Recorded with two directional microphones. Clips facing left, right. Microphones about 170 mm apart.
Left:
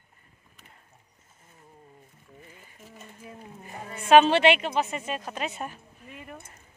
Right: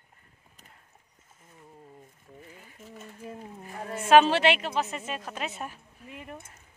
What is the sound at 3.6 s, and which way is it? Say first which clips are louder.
A woman's voice: right 4 dB; centre (ahead or behind).